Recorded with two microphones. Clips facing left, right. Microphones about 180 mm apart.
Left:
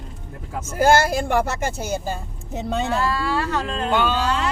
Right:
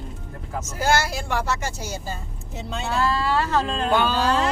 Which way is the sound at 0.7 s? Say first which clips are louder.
Left 6 dB; 50° left (ahead or behind).